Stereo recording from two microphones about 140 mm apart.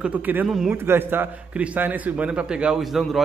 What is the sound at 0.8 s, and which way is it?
A man's voice, 15° right (ahead or behind).